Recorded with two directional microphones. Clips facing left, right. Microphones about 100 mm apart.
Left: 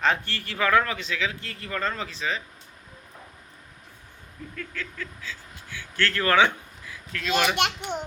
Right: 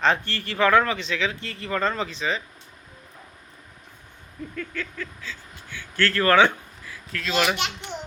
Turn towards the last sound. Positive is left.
turn(degrees=55)  # may be behind; listen again after turning